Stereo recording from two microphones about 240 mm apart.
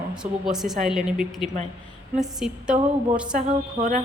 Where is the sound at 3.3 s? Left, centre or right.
Right.